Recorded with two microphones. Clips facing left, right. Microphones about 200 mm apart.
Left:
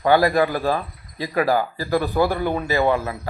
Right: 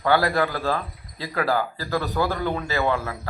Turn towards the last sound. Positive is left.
turn(degrees=15)  # may be behind; listen again after turning